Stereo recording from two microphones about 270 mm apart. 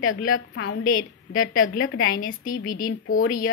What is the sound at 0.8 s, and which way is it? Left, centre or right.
Speech, left.